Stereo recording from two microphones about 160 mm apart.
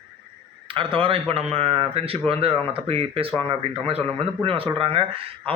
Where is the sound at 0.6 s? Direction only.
30° right (ahead or behind).